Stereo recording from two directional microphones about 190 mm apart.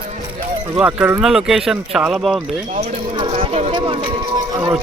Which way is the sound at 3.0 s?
25° right (ahead or behind).